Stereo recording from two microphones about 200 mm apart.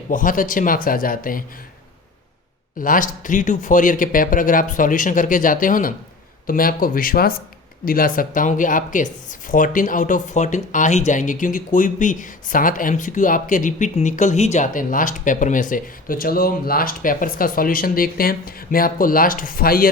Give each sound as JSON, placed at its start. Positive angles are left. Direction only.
{"t": 0.1, "sound": "speech", "side_deg": 40}
{"t": 2.7, "sound": "speech", "side_deg": 45}